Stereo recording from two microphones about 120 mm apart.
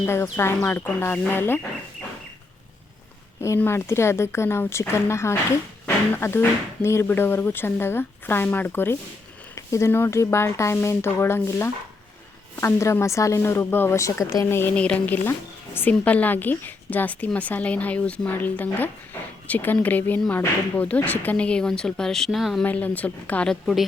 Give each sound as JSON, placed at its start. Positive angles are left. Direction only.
{"t": 0.0, "sound": "speech", "side_deg": 20}
{"t": 3.6, "sound": "a woman's voice", "side_deg": 20}
{"t": 22.6, "sound": "a woman's voice", "side_deg": 15}